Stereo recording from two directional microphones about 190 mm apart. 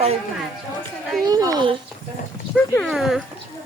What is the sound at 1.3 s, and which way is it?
Speech, 20° right (ahead or behind).